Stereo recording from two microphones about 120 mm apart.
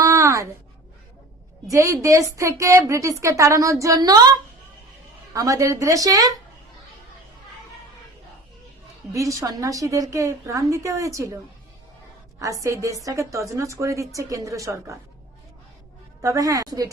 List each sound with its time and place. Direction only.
0.0 s a sound: 25° right (ahead or behind)
1.7 s a woman's voice: 25° right (ahead or behind)
5.3 s a woman's voice: 25° right (ahead or behind)
9.1 s a woman's voice: 30° right (ahead or behind)
12.4 s a woman's voice: 25° right (ahead or behind)
16.2 s a woman's voice: 30° right (ahead or behind)